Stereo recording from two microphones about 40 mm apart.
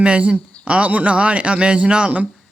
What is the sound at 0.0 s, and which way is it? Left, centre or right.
Speech, right.